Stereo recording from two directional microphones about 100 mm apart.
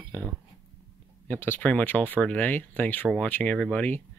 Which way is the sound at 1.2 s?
20° left (ahead or behind).